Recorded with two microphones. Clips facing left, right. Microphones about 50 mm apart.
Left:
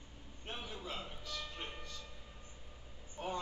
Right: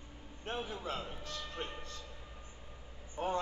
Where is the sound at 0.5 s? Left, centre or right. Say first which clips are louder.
Right 6 dB; right.